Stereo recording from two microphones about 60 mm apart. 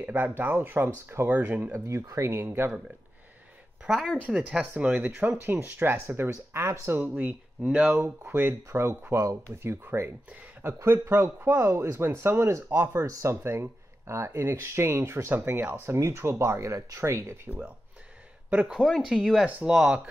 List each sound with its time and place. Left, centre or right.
0.0 s speech: right
1.7 s speech: right
2.4 s speech: right
3.8 s speech: centre
4.4 s speech: right
5.4 s speech: right
7.2 s speech: right
9.1 s speech: right
9.6 s speech: right
13.0 s speech: right
15.3 s speech: right
18.7 s speech: centre
19.0 s speech: centre